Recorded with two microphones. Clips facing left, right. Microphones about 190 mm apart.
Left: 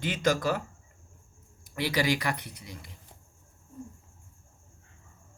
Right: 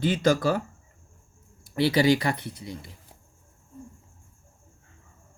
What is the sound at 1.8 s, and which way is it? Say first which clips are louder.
Speech: right 7 dB; 30° right (ahead or behind).